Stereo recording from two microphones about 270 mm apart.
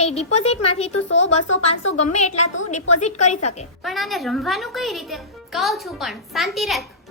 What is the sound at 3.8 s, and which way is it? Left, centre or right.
Speech, centre.